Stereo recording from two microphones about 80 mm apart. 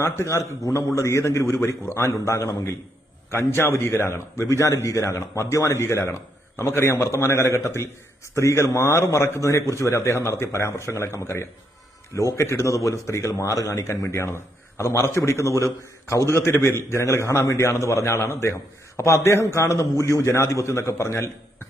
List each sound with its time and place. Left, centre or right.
0.0 s a man's voice: left
3.2 s a man's voice: left